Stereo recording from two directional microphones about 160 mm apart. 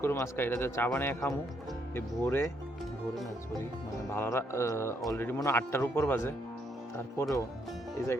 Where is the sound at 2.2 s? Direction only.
10° left (ahead or behind).